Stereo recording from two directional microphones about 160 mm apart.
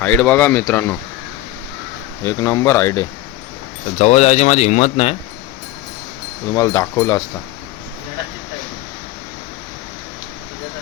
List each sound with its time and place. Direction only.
0.0 s speech: 10° left (ahead or behind)
2.2 s speech: 20° left (ahead or behind)
3.9 s speech: 45° left (ahead or behind)
6.5 s speech: 20° left (ahead or behind)